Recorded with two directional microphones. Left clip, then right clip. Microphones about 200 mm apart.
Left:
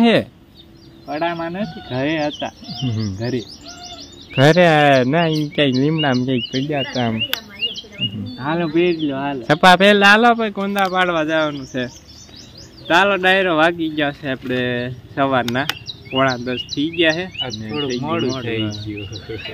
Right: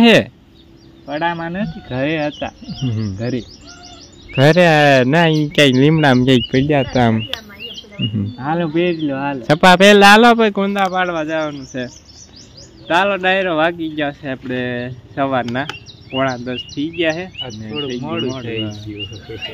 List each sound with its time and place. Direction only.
0.0 s speech: 25° right (ahead or behind)
1.0 s speech: 50° right (ahead or behind)
2.8 s speech: 15° right (ahead or behind)
3.2 s speech: 50° right (ahead or behind)
4.3 s speech: 15° right (ahead or behind); by 7.2 s 50° right (ahead or behind)
8.4 s speech: 35° right (ahead or behind)
9.4 s speech: 20° right (ahead or behind)
10.2 s speech: 50° right (ahead or behind)
11.0 s speech: 5° left (ahead or behind)
18.0 s speech: 20° left (ahead or behind)